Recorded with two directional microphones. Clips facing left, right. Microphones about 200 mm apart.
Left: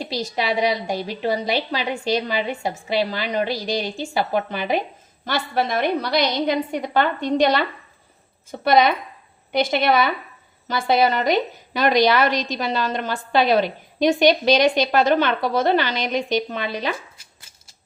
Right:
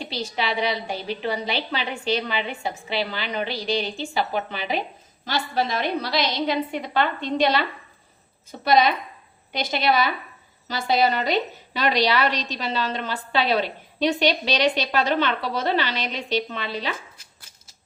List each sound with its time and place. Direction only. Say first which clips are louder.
0.0 s a woman's voice: left 3 dB; 40° left (ahead or behind)
8.6 s a woman's voice: left 2 dB; 55° left (ahead or behind)